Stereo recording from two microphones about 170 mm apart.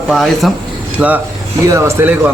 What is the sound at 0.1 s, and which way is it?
Speech, centre (ahead or behind).